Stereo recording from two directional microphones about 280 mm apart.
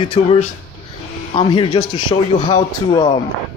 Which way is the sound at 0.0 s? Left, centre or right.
Left.